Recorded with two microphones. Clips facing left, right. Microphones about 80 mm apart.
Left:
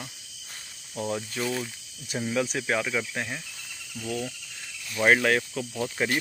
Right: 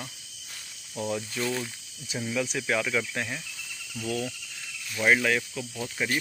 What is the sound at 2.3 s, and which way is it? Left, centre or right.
Speech, left.